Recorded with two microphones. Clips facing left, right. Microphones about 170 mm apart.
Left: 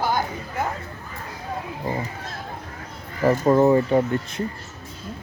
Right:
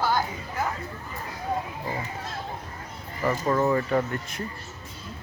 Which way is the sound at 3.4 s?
30° left (ahead or behind).